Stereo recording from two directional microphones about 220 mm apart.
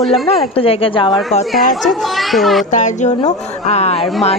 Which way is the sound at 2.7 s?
35° left (ahead or behind).